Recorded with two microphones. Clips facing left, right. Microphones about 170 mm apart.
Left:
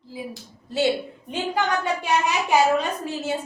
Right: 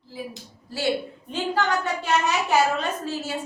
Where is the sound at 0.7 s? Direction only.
20° left (ahead or behind).